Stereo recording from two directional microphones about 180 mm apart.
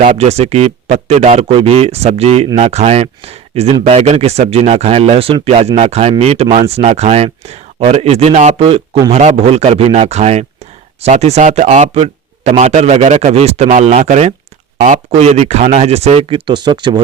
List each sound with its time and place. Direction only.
0.0 s speech: 40° right (ahead or behind); by 17.0 s 25° right (ahead or behind)